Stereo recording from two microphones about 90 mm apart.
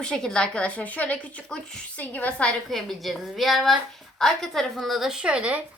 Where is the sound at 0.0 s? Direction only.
5° left (ahead or behind).